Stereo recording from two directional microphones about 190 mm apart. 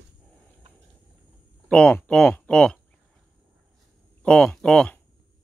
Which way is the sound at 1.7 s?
5° left (ahead or behind).